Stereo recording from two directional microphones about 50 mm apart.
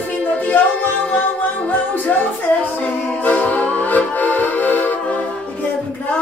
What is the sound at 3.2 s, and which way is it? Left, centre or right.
Music, left.